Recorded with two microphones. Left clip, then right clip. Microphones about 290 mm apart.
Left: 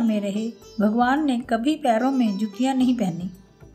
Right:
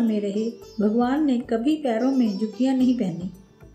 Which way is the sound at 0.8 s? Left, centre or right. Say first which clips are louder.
Left 2 dB; left.